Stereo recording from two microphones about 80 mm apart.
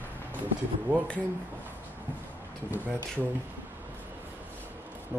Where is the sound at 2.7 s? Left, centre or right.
Right.